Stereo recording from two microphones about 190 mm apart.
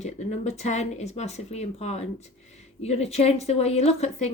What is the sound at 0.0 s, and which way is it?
Speech, 35° left (ahead or behind).